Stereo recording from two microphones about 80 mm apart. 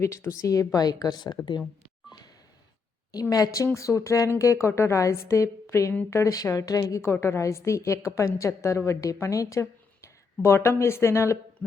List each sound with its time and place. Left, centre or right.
0.0 s speech: left
3.1 s a woman's voice: left
6.3 s speech: left
7.1 s a woman's voice: left